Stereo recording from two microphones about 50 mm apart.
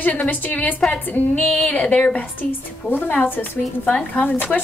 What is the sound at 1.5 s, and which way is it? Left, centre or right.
A woman's voice, left.